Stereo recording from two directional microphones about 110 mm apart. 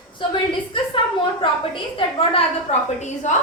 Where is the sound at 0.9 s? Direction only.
50° left (ahead or behind).